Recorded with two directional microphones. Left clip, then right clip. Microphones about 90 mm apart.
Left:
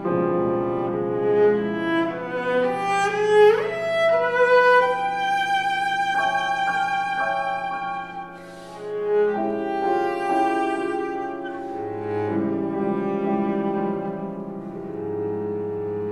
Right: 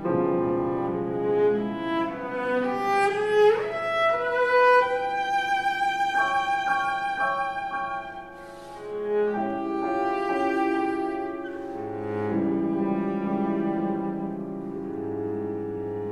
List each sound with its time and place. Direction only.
0.3 s music: 30° left (ahead or behind)
9.0 s music: 35° left (ahead or behind)
12.8 s music: 35° left (ahead or behind)